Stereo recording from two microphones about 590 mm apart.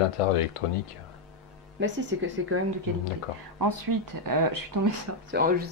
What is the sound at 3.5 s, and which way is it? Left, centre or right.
Speech, right.